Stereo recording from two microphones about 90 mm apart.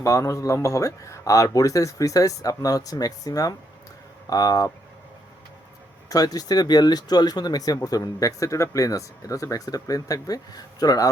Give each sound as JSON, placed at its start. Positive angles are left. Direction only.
{"t": 0.0, "sound": "speech", "side_deg": 35}
{"t": 6.1, "sound": "speech", "side_deg": 45}